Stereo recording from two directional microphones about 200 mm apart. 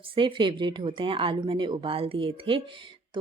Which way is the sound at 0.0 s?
25° right (ahead or behind).